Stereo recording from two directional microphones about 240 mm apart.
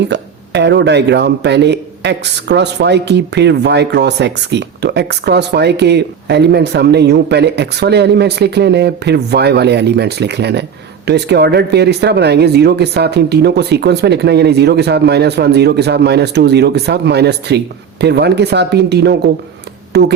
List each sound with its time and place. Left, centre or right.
0.1 s speech: right